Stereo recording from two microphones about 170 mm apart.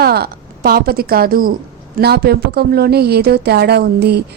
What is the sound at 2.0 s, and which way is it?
Speech, 70° right (ahead or behind).